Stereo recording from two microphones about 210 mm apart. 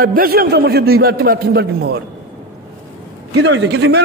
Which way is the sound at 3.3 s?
60° right (ahead or behind).